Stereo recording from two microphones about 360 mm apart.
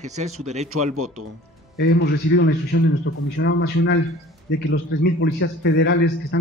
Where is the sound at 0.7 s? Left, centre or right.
Right.